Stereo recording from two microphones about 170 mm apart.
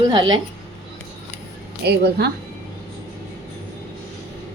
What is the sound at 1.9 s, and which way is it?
Speech, 75° right (ahead or behind).